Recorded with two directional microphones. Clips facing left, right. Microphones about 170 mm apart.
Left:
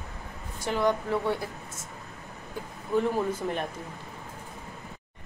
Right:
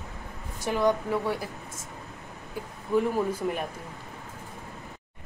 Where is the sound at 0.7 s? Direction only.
15° right (ahead or behind).